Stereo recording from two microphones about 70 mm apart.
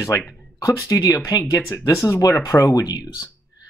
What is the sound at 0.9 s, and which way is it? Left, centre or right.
Speech, left.